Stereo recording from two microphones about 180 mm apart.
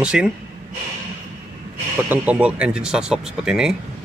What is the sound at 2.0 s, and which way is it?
Speech, 10° right (ahead or behind).